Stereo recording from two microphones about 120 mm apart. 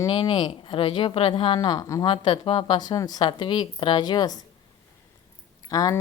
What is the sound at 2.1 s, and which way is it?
Speech, 40° left (ahead or behind).